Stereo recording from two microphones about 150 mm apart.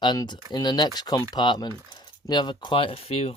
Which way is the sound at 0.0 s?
30° left (ahead or behind).